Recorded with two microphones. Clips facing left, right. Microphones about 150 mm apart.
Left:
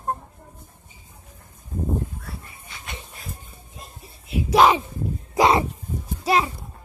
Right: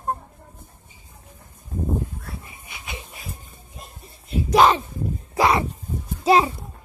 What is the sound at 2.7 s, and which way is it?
Dog, 10° right (ahead or behind).